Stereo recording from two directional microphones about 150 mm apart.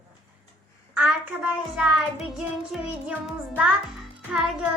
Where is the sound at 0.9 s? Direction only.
10° right (ahead or behind).